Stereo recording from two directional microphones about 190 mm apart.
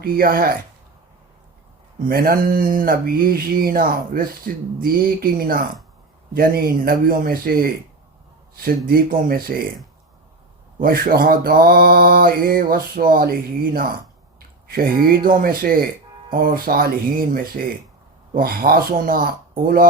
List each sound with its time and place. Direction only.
0.0 s mantra: 50° right (ahead or behind)
2.0 s mantra: 50° right (ahead or behind)
10.8 s mantra: 50° right (ahead or behind)
14.3 s speech: 50° right (ahead or behind)
16.3 s mantra: 50° right (ahead or behind)